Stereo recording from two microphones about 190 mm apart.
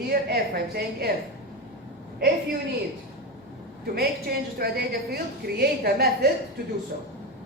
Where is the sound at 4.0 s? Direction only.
55° right (ahead or behind).